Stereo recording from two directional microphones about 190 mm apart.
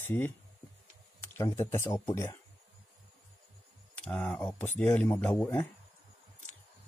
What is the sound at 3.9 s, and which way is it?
Speech, 5° left (ahead or behind).